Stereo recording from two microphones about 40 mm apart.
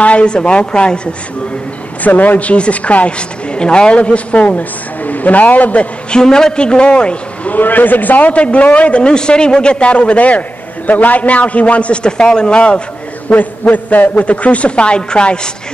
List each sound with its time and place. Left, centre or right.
0.0 s a man's voice: left
2.0 s a woman's voice: left
6.0 s a man's voice: centre
7.5 s a woman's voice: left
12.0 s a man's voice: left
13.3 s a woman's voice: left